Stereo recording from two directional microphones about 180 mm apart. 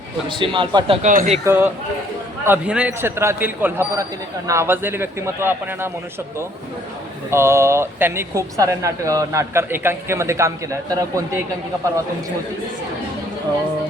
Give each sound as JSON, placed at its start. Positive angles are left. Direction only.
{"t": 0.3, "sound": "a man's voice", "side_deg": -25}
{"t": 1.0, "sound": "speech", "side_deg": -45}
{"t": 1.5, "sound": "speech", "side_deg": -10}
{"t": 7.3, "sound": "speech", "side_deg": -15}